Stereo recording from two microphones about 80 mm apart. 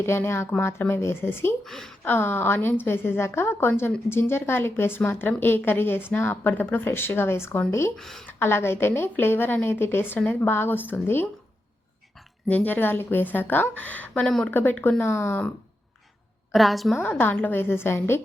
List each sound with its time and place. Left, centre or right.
0.0 s speech: left
1.6 s a woman's voice: centre
2.0 s a woman's voice: left
7.9 s a woman's voice: centre
8.3 s a woman's voice: left
12.5 s a woman's voice: left
14.5 s a woman's voice: left
15.0 s speech: left
16.5 s a woman's voice: centre
17.0 s a woman's voice: left